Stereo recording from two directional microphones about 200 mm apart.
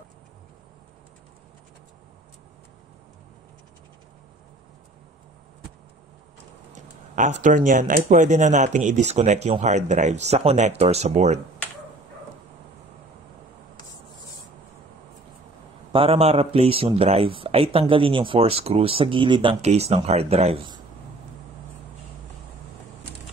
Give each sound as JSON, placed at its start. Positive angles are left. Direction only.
{"t": 6.7, "sound": "speech", "side_deg": -35}
{"t": 15.9, "sound": "speech", "side_deg": -30}